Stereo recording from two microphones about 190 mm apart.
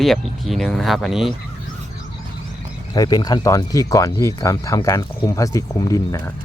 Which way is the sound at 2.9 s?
20° left (ahead or behind).